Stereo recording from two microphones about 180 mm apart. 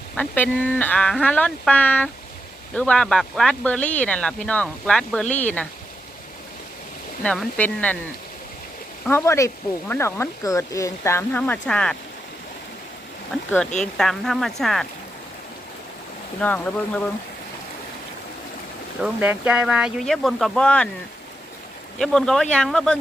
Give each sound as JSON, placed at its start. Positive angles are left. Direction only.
{"t": 0.2, "sound": "speech", "side_deg": 10}
{"t": 7.2, "sound": "speech", "side_deg": 5}
{"t": 9.0, "sound": "speech", "side_deg": 15}
{"t": 13.3, "sound": "speech", "side_deg": 0}
{"t": 16.4, "sound": "speech", "side_deg": 10}
{"t": 19.0, "sound": "speech", "side_deg": -10}
{"t": 21.9, "sound": "speech", "side_deg": 5}